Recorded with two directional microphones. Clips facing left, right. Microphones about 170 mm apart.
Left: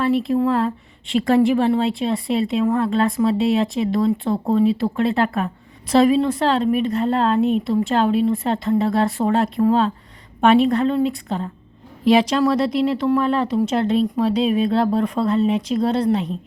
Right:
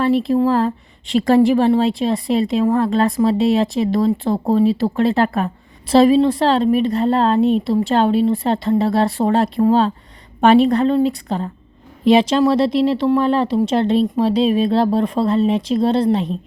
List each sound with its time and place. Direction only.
0.0 s a woman's voice: 35° right (ahead or behind)
12.0 s speech: 25° right (ahead or behind)